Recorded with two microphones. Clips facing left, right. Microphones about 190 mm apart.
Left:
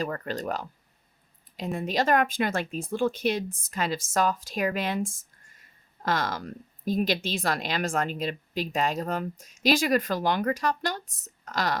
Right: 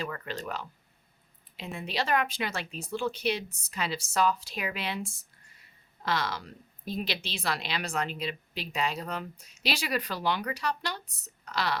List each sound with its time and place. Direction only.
0.0 s speech: 40° left (ahead or behind)